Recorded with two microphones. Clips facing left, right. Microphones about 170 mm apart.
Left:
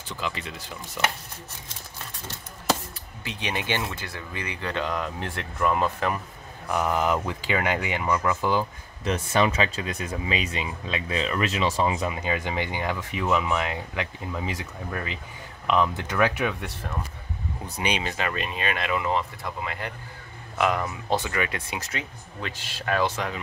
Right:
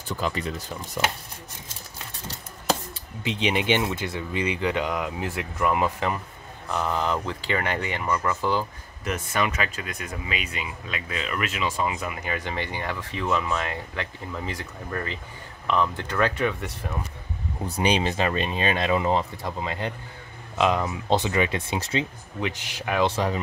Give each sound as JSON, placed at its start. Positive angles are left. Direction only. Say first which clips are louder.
{"t": 0.2, "sound": "speech", "louder": "right 3 dB", "side_deg": -45}
{"t": 3.3, "sound": "speech", "louder": "right 6 dB", "side_deg": -20}
{"t": 6.7, "sound": "speech", "louder": "left 2 dB", "side_deg": 15}
{"t": 9.0, "sound": "speech", "louder": "left 3 dB", "side_deg": 30}
{"t": 17.7, "sound": "speech", "louder": "right 5 dB", "side_deg": -30}
{"t": 22.4, "sound": "speech", "louder": "right 5 dB", "side_deg": -15}
{"t": 23.1, "sound": "speech", "louder": "right 5 dB", "side_deg": -35}